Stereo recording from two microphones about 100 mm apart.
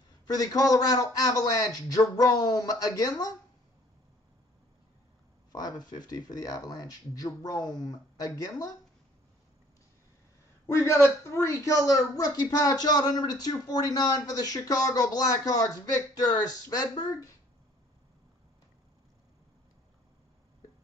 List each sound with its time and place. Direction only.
0.3 s speech: 40° left (ahead or behind)
5.5 s speech: 40° left (ahead or behind)
10.7 s a woman's voice: 25° left (ahead or behind); by 17.3 s 45° left (ahead or behind)